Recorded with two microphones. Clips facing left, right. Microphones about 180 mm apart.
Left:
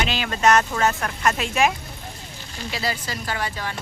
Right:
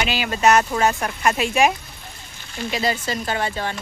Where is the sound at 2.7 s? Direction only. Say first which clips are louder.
Right 5 dB; 20° right (ahead or behind).